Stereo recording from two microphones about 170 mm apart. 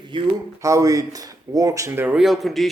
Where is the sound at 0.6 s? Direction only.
20° right (ahead or behind); by 2.7 s centre (ahead or behind).